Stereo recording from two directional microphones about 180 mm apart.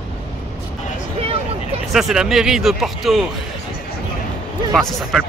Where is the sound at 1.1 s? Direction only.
35° right (ahead or behind).